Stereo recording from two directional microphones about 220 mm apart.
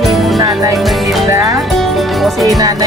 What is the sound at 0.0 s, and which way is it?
Music, centre (ahead or behind).